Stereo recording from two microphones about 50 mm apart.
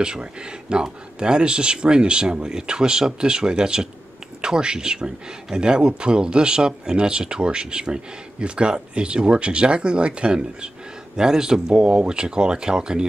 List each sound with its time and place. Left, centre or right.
0.0 s speech: centre